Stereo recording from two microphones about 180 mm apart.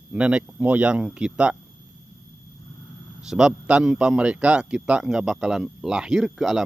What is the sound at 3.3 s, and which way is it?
A man's voice, 5° right (ahead or behind).